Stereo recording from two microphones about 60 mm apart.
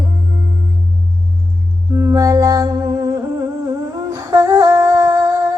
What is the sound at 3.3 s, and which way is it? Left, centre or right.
Humming, right.